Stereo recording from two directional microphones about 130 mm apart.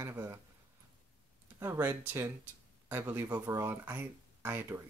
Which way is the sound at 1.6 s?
20° right (ahead or behind).